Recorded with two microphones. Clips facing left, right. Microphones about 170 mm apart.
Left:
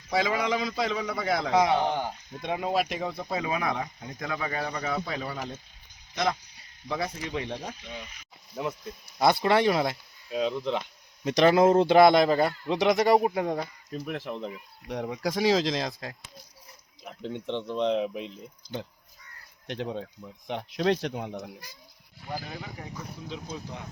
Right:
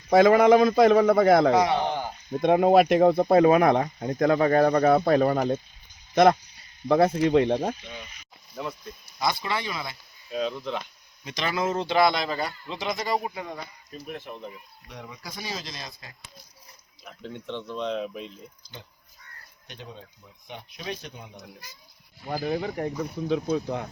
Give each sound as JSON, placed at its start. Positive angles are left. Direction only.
{"t": 0.1, "sound": "speech", "side_deg": -55}
{"t": 1.5, "sound": "speech", "side_deg": 0}
{"t": 2.4, "sound": "speech", "side_deg": -55}
{"t": 6.8, "sound": "speech", "side_deg": -55}
{"t": 9.1, "sound": "speech", "side_deg": 55}
{"t": 10.3, "sound": "speech", "side_deg": 15}
{"t": 11.2, "sound": "speech", "side_deg": 65}
{"t": 11.4, "sound": "speech", "side_deg": 55}
{"t": 13.9, "sound": "speech", "side_deg": 90}
{"t": 17.0, "sound": "speech", "side_deg": 20}
{"t": 19.6, "sound": "speech", "side_deg": 85}
{"t": 22.5, "sound": "speech", "side_deg": -55}